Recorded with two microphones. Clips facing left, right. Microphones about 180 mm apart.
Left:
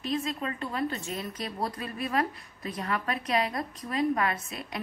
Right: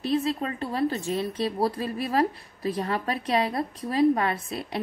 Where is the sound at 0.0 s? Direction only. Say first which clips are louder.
Right 5 dB; 35° right (ahead or behind).